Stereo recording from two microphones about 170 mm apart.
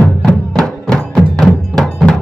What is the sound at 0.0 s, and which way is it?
Music, 5° left (ahead or behind).